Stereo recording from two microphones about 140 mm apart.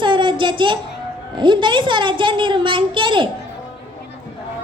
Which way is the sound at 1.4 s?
35° right (ahead or behind).